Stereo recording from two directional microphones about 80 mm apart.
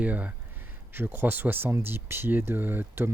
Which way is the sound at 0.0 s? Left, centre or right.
Centre.